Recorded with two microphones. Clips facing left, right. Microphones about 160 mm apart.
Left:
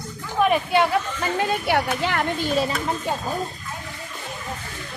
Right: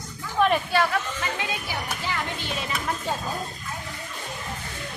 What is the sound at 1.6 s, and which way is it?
Speech, 70° left (ahead or behind).